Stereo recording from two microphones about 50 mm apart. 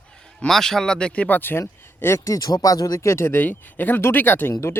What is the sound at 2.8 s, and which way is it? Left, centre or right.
Speech, left.